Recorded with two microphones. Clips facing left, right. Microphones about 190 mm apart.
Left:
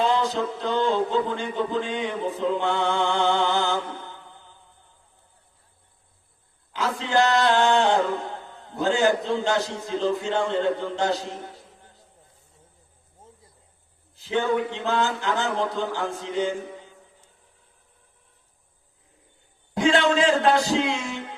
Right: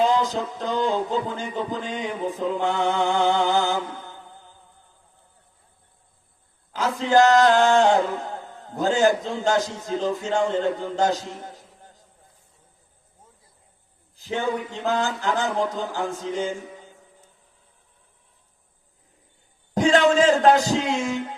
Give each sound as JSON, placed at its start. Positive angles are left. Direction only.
{"t": 0.0, "sound": "speech", "side_deg": -40}
{"t": 6.7, "sound": "chant", "side_deg": -40}
{"t": 14.2, "sound": "speech", "side_deg": -40}
{"t": 19.7, "sound": "a man's voice", "side_deg": -40}